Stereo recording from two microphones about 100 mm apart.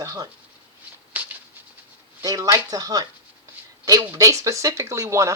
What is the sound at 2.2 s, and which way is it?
Speech, 35° right (ahead or behind).